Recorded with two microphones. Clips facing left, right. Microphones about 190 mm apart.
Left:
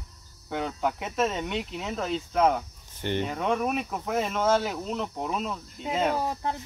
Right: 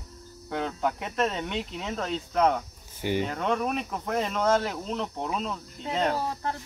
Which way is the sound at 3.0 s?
10° right (ahead or behind).